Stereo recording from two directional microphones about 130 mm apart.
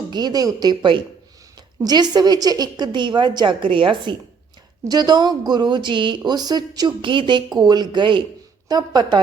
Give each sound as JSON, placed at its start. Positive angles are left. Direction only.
{"t": 0.1, "sound": "speech", "side_deg": -30}